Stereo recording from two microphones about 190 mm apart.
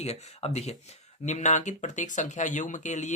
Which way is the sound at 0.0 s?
35° left (ahead or behind).